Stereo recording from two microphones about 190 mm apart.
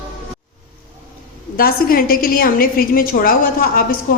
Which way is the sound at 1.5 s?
50° left (ahead or behind).